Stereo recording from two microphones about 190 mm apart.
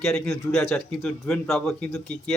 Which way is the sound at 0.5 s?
Centre (ahead or behind).